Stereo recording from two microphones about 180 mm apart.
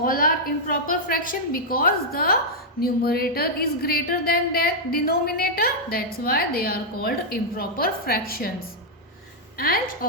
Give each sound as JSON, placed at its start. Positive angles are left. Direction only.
{"t": 0.0, "sound": "a woman's voice", "side_deg": 50}
{"t": 9.6, "sound": "a woman's voice", "side_deg": 55}